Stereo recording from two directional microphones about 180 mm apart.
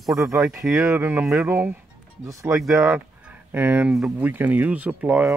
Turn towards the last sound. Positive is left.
turn(degrees=-10)  # may be behind; listen again after turning